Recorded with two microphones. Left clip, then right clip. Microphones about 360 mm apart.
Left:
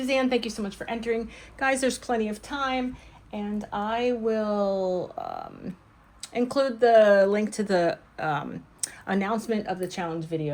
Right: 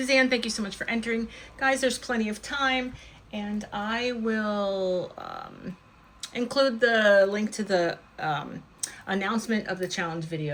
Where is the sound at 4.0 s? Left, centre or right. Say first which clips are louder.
Left 5 dB; centre.